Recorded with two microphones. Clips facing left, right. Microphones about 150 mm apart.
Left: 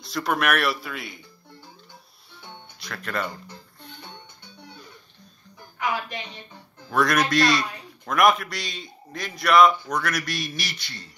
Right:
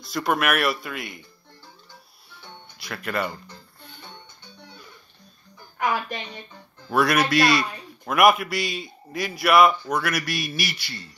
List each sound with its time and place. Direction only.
0.0 s a man's voice: centre (ahead or behind)
2.8 s speech: 5° right (ahead or behind)
5.8 s music: 50° right (ahead or behind)
6.9 s a man's voice: 5° right (ahead or behind)